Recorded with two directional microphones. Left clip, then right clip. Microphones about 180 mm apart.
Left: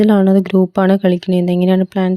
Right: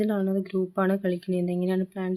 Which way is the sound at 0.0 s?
50° left (ahead or behind).